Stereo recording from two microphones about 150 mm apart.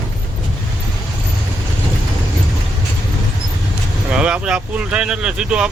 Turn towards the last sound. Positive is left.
turn(degrees=-5)  # may be behind; listen again after turning